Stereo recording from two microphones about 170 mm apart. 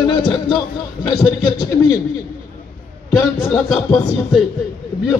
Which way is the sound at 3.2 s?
20° left (ahead or behind).